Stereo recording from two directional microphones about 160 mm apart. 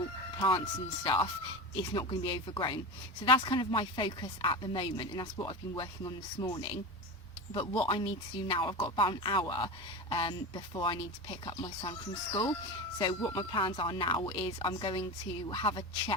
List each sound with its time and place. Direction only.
0.3 s a woman's voice: 30° left (ahead or behind)